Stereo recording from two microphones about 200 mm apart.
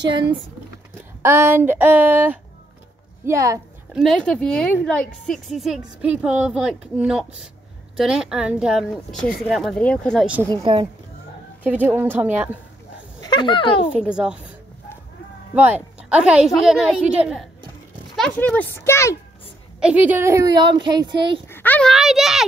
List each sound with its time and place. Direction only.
0.1 s speech: 25° right (ahead or behind)
1.2 s speech: 10° right (ahead or behind)
3.9 s speech: centre (ahead or behind)
10.5 s speech: 25° right (ahead or behind)
11.6 s speech: 10° right (ahead or behind)
13.2 s speech: 20° left (ahead or behind)
14.0 s speech: 5° right (ahead or behind)
15.5 s speech: 10° right (ahead or behind); by 19.1 s 15° left (ahead or behind)
19.8 s speech: 5° right (ahead or behind); by 21.4 s 20° right (ahead or behind)
21.5 s speech: 10° left (ahead or behind)